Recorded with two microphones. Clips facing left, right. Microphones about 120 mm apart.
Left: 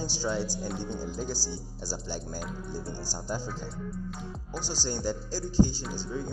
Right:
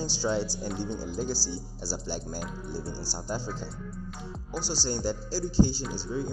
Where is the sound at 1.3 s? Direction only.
20° left (ahead or behind).